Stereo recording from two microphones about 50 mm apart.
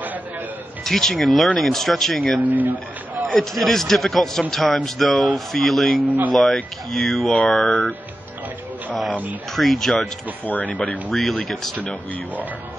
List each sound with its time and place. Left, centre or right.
0.8 s a man's voice: centre
2.4 s speech: right
3.3 s a man's voice: centre
6.0 s speech: right
6.3 s a man's voice: centre
9.5 s a man's voice: centre
10.4 s speech: left